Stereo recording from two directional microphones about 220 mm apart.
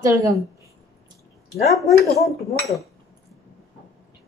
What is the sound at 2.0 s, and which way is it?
Speech, 30° left (ahead or behind).